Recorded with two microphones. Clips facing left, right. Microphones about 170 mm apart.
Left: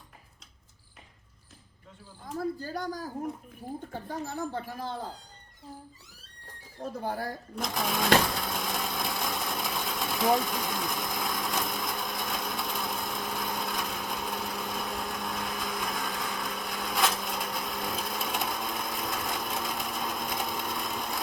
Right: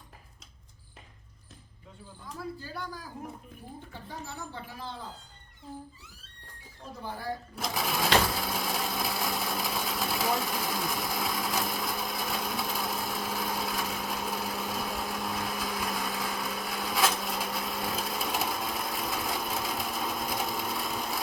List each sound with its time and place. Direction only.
2.2 s speech: 45° left (ahead or behind)
6.7 s speech: 45° left (ahead or behind)
7.5 s sewing machine: 5° right (ahead or behind)